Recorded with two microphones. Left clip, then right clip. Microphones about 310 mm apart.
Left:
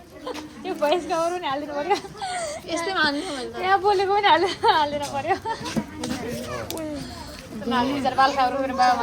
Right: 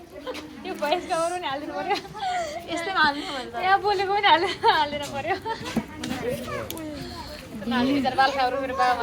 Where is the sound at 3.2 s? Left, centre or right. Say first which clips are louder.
Even; centre.